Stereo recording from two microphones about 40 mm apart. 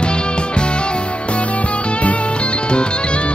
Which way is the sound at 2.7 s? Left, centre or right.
Left.